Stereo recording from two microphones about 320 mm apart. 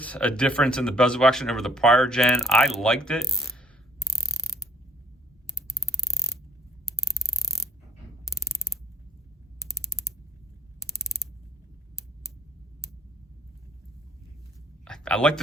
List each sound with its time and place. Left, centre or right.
0.0 s speech: centre
2.8 s mechanisms: centre
14.8 s a sound: centre